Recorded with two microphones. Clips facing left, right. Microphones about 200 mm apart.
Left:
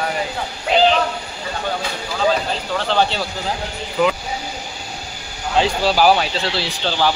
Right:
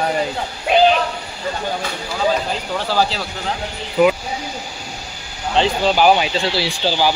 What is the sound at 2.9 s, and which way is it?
Speech, centre (ahead or behind).